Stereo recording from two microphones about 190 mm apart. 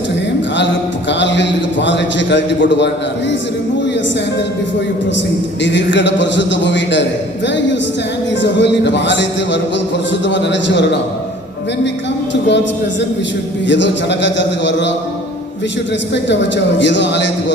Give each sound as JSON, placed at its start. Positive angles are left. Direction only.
{"t": 1.2, "sound": "a man's voice", "side_deg": 70}
{"t": 5.6, "sound": "a man's voice", "side_deg": 70}
{"t": 12.3, "sound": "a man's voice", "side_deg": 65}
{"t": 13.7, "sound": "a man's voice", "side_deg": 70}
{"t": 16.1, "sound": "a man's voice", "side_deg": 65}